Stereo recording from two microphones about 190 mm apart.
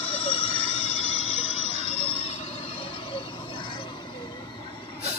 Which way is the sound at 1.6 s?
35° right (ahead or behind).